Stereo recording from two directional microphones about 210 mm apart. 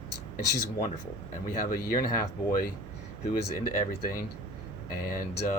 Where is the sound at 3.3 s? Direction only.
40° left (ahead or behind).